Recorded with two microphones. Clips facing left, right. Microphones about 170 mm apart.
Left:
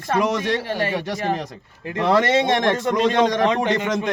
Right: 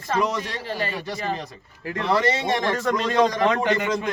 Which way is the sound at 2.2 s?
90° left.